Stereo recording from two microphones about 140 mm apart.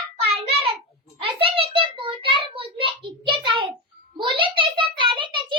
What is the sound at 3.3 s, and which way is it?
Child singing, 35° right (ahead or behind).